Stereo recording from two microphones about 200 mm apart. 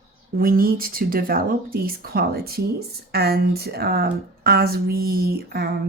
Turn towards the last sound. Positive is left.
turn(degrees=-50)  # may be behind; listen again after turning